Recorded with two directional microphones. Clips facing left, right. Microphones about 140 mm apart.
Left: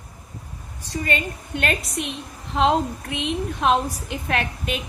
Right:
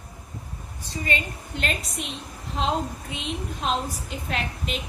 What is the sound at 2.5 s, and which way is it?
Speech, 90° left.